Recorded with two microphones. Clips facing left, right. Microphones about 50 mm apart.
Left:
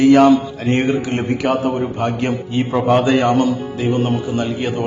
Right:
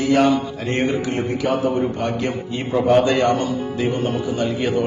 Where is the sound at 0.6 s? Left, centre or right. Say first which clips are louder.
Left 4 dB; centre.